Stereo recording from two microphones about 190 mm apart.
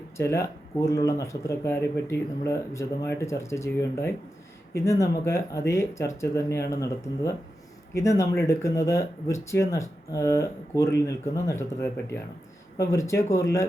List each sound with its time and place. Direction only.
0.2 s speech: 15° left (ahead or behind)
12.9 s speech: 15° left (ahead or behind)